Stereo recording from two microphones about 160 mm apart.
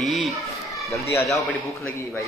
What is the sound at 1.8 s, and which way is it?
Speech, 20° left (ahead or behind).